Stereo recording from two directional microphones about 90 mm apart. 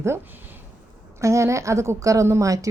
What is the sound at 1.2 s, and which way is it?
Speech, 35° right (ahead or behind).